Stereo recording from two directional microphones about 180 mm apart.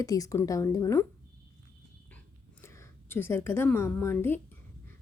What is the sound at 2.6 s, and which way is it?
A woman's voice, 10° left (ahead or behind).